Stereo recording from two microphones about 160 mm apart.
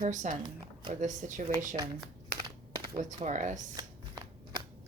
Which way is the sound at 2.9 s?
50° right (ahead or behind).